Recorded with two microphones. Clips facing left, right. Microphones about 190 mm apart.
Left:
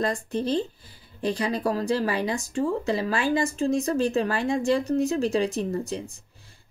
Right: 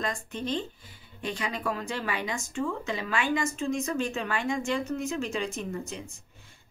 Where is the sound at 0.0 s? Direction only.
35° left (ahead or behind).